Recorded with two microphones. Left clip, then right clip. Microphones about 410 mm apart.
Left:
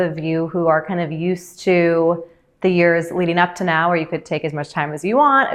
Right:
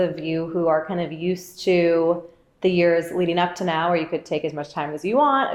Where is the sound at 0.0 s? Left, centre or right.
Left.